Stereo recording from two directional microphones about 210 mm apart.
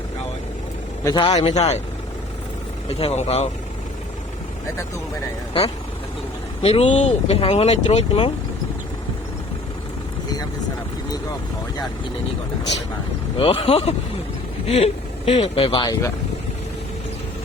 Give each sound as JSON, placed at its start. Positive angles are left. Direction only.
{"t": 1.0, "sound": "speech", "side_deg": 20}
{"t": 3.0, "sound": "speech", "side_deg": 30}
{"t": 6.6, "sound": "speech", "side_deg": 30}
{"t": 13.3, "sound": "speech", "side_deg": 25}